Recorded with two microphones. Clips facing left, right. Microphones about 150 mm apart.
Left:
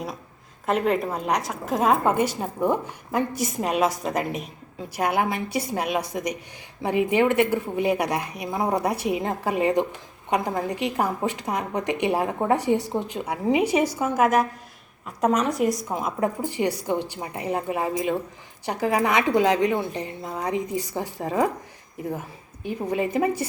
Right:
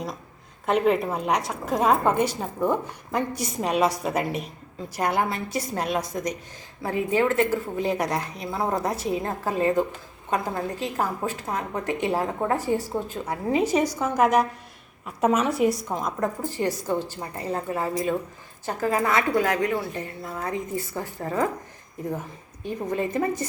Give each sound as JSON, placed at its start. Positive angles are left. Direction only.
{"t": 0.6, "sound": "a woman's voice", "side_deg": 0}
{"t": 16.4, "sound": "a woman's voice", "side_deg": 15}
{"t": 22.6, "sound": "a woman's voice", "side_deg": 10}